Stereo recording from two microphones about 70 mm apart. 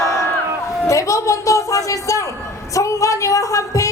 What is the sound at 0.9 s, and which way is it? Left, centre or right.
A woman's voice, left.